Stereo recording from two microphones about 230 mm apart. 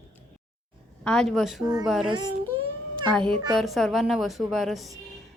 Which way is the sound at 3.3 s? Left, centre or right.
Centre.